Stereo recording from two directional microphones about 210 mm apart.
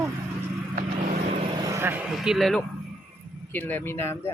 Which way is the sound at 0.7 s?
35° right (ahead or behind).